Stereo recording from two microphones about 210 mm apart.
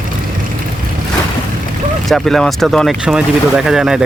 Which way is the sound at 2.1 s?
Centre (ahead or behind).